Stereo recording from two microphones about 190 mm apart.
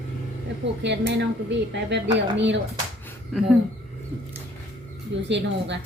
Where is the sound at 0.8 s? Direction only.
70° right (ahead or behind).